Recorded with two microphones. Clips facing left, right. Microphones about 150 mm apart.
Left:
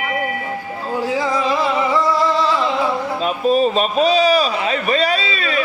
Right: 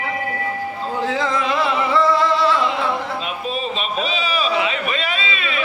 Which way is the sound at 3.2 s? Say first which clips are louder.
Left 9 dB; 40° left (ahead or behind).